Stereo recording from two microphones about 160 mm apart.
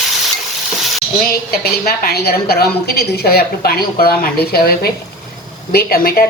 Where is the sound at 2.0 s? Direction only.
80° left.